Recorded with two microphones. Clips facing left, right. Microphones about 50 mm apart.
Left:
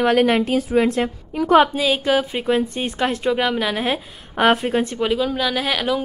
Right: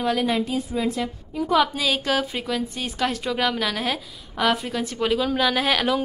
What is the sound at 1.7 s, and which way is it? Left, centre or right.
A woman's voice, centre.